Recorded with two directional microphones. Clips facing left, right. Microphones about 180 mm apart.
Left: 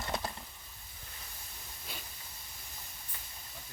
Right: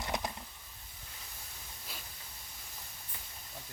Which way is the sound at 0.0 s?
15° right (ahead or behind).